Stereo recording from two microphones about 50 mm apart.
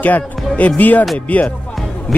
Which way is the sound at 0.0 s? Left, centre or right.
Left.